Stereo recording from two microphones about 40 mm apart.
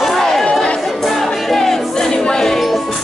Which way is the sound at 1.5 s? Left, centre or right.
Centre.